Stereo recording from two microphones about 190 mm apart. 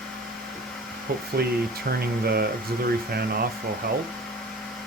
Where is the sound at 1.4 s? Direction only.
55° right (ahead or behind).